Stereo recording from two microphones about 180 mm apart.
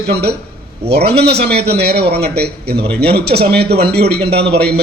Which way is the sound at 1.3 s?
65° right (ahead or behind).